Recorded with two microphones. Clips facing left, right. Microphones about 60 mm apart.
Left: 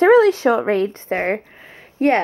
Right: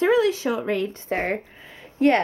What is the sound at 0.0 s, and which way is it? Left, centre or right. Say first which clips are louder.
Speech: left 8 dB; left.